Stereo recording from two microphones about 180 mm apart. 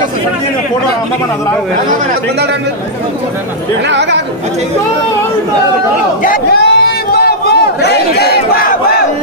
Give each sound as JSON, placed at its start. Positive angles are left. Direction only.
{"t": 3.9, "sound": "speech", "side_deg": -75}
{"t": 6.2, "sound": "speech", "side_deg": 50}
{"t": 6.6, "sound": "a sound", "side_deg": 65}